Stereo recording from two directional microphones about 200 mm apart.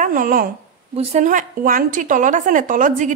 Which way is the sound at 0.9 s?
35° right (ahead or behind).